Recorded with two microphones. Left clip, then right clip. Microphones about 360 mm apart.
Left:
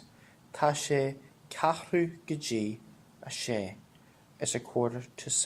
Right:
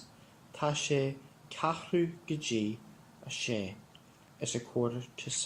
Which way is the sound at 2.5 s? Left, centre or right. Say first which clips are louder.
Even; left.